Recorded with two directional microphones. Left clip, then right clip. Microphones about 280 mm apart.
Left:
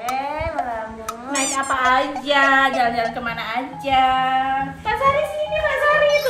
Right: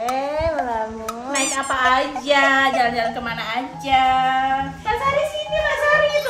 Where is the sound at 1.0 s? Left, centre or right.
Centre.